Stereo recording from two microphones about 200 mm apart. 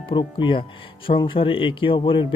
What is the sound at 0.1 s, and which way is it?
Speech, 25° left (ahead or behind).